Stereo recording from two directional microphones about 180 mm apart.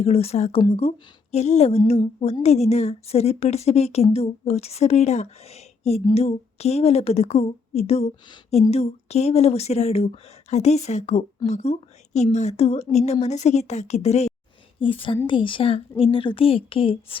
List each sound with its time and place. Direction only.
0.0 s a woman's voice: 35° left (ahead or behind)